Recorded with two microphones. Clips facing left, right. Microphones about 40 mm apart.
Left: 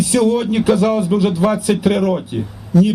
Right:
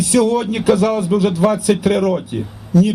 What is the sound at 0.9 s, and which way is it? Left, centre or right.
Speech, left.